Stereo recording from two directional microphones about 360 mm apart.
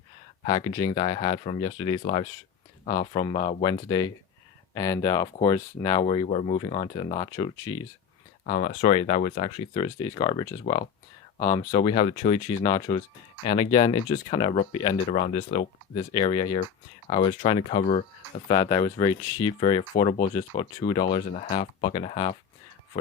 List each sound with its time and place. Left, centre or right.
0.5 s speech: centre